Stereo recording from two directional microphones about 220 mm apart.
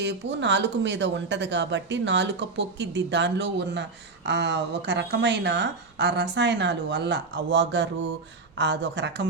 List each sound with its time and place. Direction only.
0.0 s speech: 55° right (ahead or behind)